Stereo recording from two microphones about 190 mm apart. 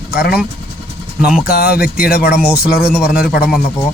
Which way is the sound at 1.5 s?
55° left (ahead or behind).